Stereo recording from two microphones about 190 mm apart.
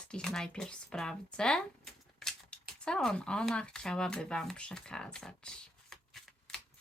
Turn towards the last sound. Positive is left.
turn(degrees=5)  # may be behind; listen again after turning